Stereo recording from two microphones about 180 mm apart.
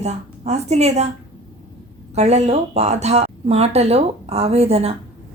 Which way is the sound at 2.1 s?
35° right (ahead or behind).